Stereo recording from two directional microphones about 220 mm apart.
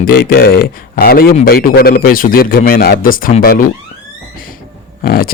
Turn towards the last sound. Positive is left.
turn(degrees=45)  # may be behind; listen again after turning